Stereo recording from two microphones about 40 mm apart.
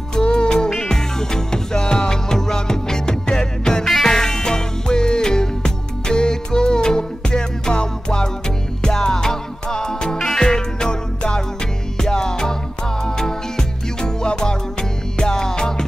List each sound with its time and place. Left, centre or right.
0.1 s music: left